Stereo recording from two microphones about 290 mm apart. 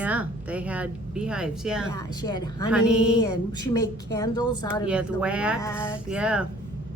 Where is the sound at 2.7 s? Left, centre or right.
Centre.